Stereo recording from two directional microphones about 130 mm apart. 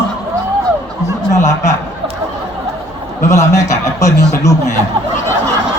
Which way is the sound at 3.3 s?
25° left (ahead or behind).